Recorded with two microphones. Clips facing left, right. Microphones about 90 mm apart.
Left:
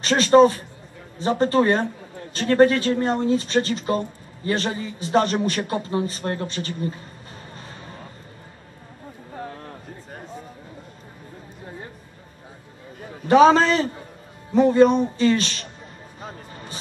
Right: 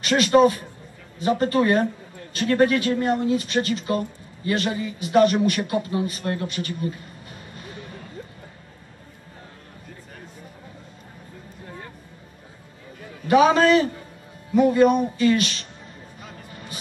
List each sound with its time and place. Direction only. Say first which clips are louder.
0.0 s a man's voice: left 2 dB; 30° left (ahead or behind)
7.5 s music: right 4 dB; 30° left (ahead or behind)
13.1 s a man's voice: left 3 dB; 30° left (ahead or behind)
16.2 s music: left 5 dB; 35° left (ahead or behind)